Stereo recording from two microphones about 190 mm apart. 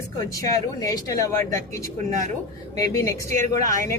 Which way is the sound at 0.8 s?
15° left (ahead or behind).